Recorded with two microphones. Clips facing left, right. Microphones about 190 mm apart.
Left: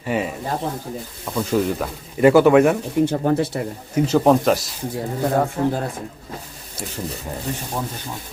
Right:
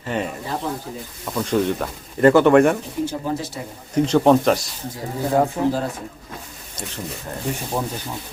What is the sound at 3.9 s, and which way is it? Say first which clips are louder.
Speech: right 1 dB; 5° left (ahead or behind).